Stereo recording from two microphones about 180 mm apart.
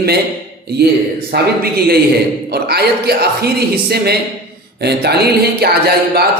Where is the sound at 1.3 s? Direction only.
60° right (ahead or behind).